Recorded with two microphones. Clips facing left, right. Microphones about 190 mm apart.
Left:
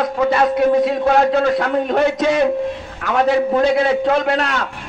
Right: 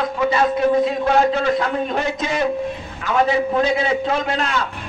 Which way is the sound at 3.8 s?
55° left (ahead or behind).